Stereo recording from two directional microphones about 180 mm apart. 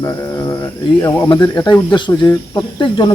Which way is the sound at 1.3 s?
25° left (ahead or behind).